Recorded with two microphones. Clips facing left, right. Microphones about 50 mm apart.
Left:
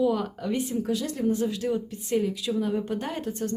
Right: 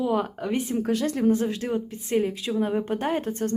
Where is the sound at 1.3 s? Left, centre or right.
Right.